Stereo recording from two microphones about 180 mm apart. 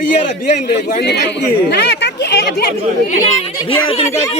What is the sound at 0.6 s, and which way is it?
A man's voice, 60° left (ahead or behind).